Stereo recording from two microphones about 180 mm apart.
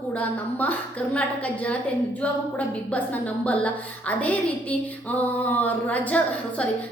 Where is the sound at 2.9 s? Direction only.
10° left (ahead or behind).